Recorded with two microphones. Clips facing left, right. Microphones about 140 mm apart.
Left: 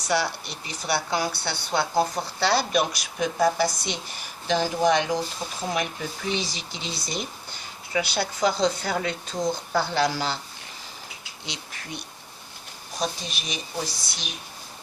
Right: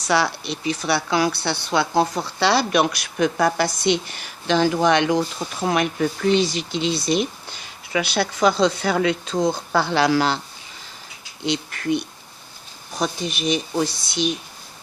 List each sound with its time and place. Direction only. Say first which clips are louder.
0.1 s speech: right 5 dB; 90° right; by 10.4 s 75° right (ahead or behind)
11.4 s speech: right 16 dB; 65° right (ahead or behind)